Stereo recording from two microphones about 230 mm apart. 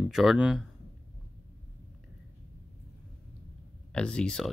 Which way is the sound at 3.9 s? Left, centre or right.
Centre.